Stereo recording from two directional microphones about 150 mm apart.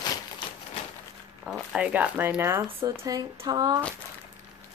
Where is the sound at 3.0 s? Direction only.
25° right (ahead or behind).